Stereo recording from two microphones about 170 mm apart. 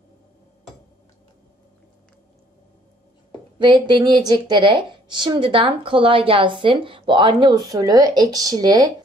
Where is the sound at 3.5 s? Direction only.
30° right (ahead or behind).